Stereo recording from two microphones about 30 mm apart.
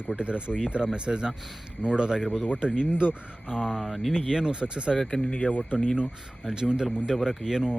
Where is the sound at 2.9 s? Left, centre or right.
Left.